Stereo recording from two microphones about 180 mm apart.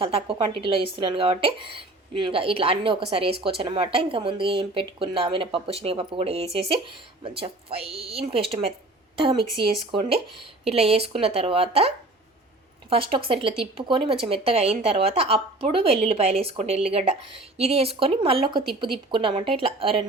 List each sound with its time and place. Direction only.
0.0 s a woman's voice: 30° right (ahead or behind)